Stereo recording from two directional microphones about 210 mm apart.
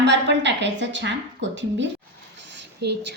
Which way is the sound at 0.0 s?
55° right (ahead or behind).